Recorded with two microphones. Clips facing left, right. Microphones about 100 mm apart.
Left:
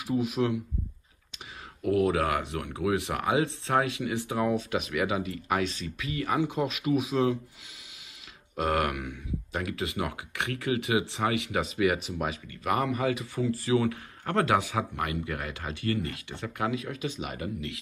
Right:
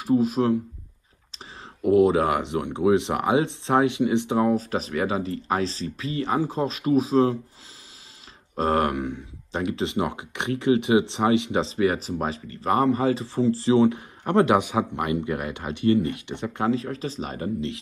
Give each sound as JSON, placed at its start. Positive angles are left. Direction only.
{"t": 0.0, "sound": "speech", "side_deg": -35}
{"t": 1.8, "sound": "speech", "side_deg": -25}
{"t": 8.5, "sound": "speech", "side_deg": -30}
{"t": 16.6, "sound": "speech", "side_deg": -35}